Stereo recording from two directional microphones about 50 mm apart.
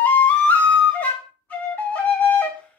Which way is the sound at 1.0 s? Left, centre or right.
Left.